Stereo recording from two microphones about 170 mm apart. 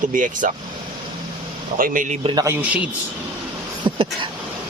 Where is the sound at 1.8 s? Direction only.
50° right (ahead or behind).